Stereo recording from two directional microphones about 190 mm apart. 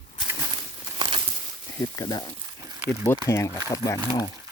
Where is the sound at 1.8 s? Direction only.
20° left (ahead or behind).